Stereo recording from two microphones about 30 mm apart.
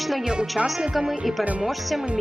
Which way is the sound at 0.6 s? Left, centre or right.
Right.